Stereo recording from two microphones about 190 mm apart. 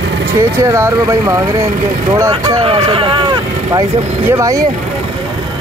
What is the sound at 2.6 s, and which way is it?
Speech, 30° right (ahead or behind).